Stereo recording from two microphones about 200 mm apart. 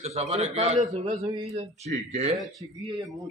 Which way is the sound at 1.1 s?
20° right (ahead or behind).